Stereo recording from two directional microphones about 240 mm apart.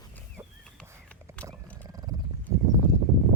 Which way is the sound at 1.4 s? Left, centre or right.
Centre.